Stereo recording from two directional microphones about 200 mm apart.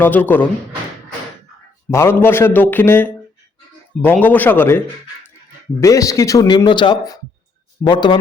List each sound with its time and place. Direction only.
0.0 s speech: 10° left (ahead or behind)
1.9 s speech: 15° left (ahead or behind)
5.8 s speech: 15° left (ahead or behind)